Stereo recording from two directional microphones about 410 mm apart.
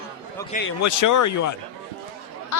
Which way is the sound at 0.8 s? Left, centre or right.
Left.